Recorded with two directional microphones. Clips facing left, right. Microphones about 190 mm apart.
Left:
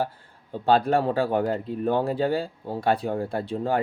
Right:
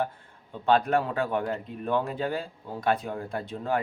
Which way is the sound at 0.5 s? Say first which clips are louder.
Left 3 dB; 35° left (ahead or behind).